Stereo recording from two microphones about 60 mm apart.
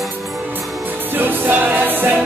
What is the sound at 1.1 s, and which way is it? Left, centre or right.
Music, right.